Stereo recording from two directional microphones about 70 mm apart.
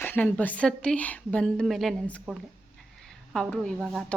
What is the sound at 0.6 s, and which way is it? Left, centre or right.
Speech, centre.